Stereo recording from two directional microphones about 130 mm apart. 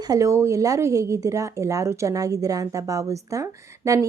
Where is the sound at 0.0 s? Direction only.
25° right (ahead or behind).